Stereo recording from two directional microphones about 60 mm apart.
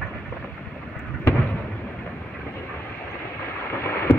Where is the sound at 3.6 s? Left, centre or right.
Left.